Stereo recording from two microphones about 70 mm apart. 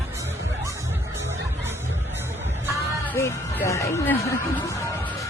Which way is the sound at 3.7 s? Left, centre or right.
Left.